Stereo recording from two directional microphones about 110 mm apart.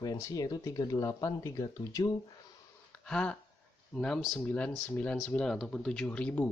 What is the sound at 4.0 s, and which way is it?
Speech, 5° left (ahead or behind).